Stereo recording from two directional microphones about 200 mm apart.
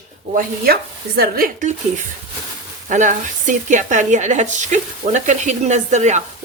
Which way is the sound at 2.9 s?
40° right (ahead or behind).